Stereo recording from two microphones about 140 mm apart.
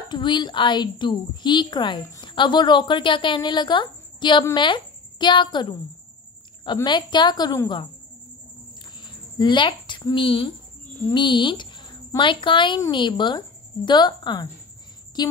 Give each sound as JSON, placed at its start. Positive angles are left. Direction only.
{"t": 0.1, "sound": "speech", "side_deg": 35}
{"t": 9.0, "sound": "a woman's voice", "side_deg": 35}